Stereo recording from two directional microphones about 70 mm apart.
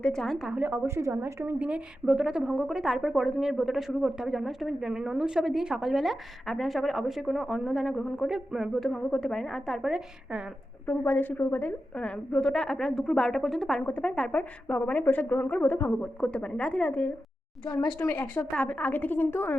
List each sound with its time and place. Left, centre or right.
0.0 s a woman's voice: centre
0.5 s a woman's voice: right
0.9 s a woman's voice: right
1.5 s a woman's voice: centre
10.8 s a woman's voice: left
11.9 s a woman's voice: centre
13.8 s a woman's voice: left
16.0 s a woman's voice: centre
17.7 s a woman's voice: left
18.0 s a woman's voice: left